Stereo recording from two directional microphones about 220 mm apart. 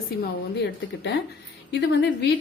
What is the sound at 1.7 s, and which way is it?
Speech, 50° left (ahead or behind).